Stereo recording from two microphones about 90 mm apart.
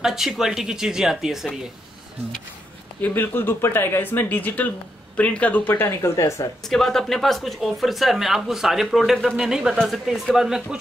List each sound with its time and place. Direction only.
0.0 s speech: 5° right (ahead or behind)
3.0 s speech: 25° left (ahead or behind)
6.1 s speech: 35° left (ahead or behind)
6.6 s speech: 5° left (ahead or behind)